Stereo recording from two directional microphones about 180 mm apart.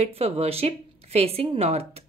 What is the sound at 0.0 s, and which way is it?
A woman's voice, 35° right (ahead or behind).